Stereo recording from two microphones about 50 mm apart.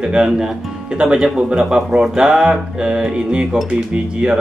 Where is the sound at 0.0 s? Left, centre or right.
Centre.